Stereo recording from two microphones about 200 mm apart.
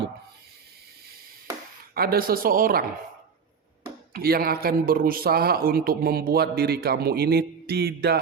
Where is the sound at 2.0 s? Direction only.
50° right (ahead or behind).